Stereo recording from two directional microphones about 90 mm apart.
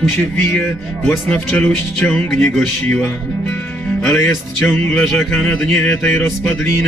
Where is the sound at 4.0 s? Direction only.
30° left (ahead or behind).